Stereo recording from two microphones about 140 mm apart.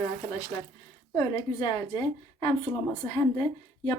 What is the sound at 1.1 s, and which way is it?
Speech, 30° left (ahead or behind).